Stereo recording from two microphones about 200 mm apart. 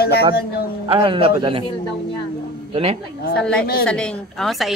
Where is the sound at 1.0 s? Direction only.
25° right (ahead or behind).